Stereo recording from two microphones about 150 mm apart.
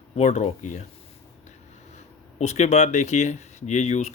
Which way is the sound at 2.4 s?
50° left (ahead or behind).